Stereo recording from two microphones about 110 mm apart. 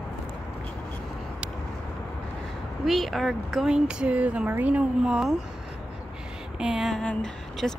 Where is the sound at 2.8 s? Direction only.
Centre (ahead or behind).